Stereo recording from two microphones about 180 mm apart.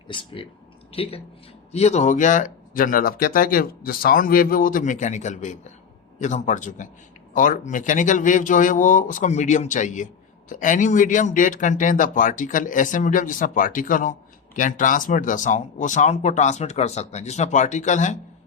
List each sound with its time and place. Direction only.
0.1 s speech: 30° left (ahead or behind)